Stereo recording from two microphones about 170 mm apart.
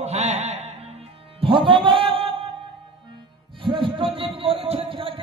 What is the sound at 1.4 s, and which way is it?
Music, 30° right (ahead or behind).